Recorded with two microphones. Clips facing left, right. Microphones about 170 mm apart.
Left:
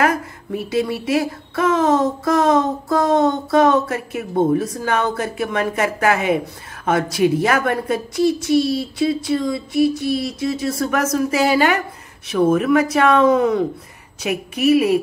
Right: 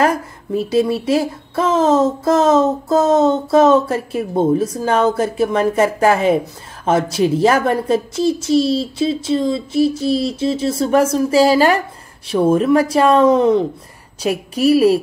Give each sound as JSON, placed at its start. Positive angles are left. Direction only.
{"t": 0.0, "sound": "a woman's voice", "side_deg": -30}